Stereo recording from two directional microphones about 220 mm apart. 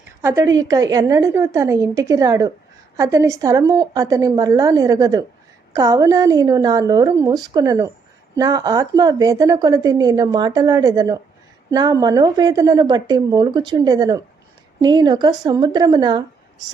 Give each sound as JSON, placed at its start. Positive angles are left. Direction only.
{"t": 0.0, "sound": "a woman's voice", "side_deg": -10}